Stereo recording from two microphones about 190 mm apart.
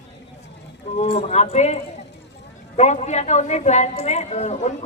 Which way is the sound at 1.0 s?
30° left (ahead or behind).